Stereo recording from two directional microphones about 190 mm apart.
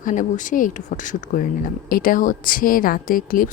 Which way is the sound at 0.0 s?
40° left (ahead or behind).